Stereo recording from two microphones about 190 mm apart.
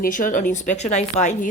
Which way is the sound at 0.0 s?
45° left (ahead or behind).